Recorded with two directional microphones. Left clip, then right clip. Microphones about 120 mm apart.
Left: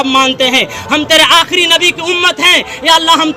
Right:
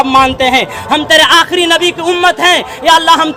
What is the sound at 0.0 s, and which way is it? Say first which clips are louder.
A man's voice: right 2 dB; 40° right (ahead or behind).